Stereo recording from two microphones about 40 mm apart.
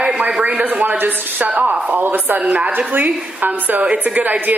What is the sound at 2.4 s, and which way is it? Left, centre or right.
Speech, right.